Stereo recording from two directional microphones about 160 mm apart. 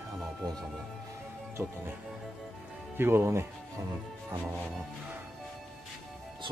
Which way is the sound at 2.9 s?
15° right (ahead or behind).